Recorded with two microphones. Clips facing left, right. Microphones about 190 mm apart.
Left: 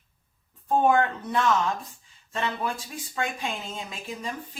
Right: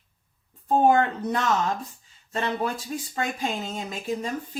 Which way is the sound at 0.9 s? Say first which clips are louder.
Right 3 dB; 40° right (ahead or behind).